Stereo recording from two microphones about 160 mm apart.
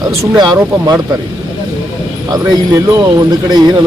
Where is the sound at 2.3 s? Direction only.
25° right (ahead or behind).